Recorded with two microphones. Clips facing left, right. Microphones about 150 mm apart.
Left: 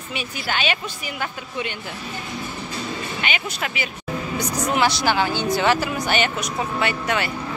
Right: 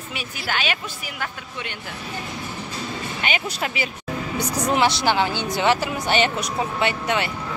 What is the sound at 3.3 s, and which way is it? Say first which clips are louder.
Speech: right 2 dB; 30° right (ahead or behind).